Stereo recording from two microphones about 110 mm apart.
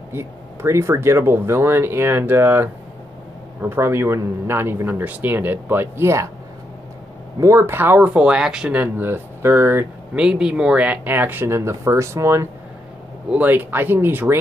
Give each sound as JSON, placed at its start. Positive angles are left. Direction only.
{"t": 0.1, "sound": "speech", "side_deg": -20}
{"t": 7.3, "sound": "speech", "side_deg": -25}
{"t": 10.1, "sound": "speech", "side_deg": -5}
{"t": 13.3, "sound": "speech", "side_deg": -15}